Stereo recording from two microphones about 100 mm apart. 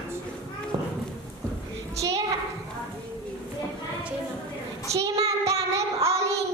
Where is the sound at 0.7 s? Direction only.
55° right (ahead or behind).